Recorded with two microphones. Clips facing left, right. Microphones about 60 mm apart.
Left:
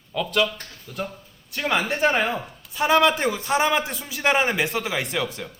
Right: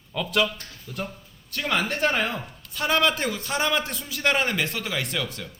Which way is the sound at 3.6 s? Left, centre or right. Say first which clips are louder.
Left 3 dB; centre.